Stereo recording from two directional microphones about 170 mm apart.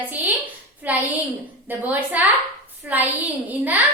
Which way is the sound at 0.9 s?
10° right (ahead or behind).